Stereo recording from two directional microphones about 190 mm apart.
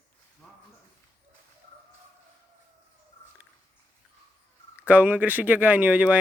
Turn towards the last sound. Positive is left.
turn(degrees=-10)  # may be behind; listen again after turning